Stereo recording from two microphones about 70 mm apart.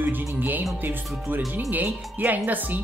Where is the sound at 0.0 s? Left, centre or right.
Right.